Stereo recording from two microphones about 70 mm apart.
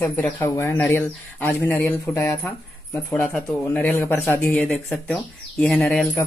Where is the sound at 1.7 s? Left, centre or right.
Centre.